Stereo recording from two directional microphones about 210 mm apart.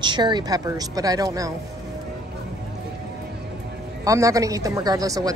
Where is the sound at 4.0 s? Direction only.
15° right (ahead or behind).